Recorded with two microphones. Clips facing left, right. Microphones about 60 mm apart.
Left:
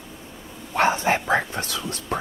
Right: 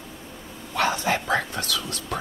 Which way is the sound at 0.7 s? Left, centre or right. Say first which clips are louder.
Left 3 dB; left.